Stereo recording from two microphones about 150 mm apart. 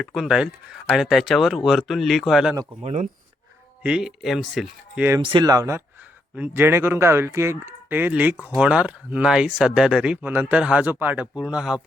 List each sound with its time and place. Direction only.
0.0 s speech: centre (ahead or behind)
2.8 s speech: 50° right (ahead or behind)
3.8 s speech: 5° right (ahead or behind)
5.2 s speech: 30° right (ahead or behind); by 11.8 s 5° right (ahead or behind)